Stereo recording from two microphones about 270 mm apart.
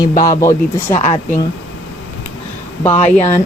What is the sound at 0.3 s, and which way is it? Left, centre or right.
Speech, centre.